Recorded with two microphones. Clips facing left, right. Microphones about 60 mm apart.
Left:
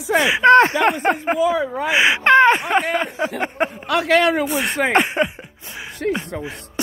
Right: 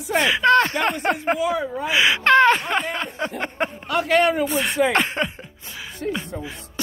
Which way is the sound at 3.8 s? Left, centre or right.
Left.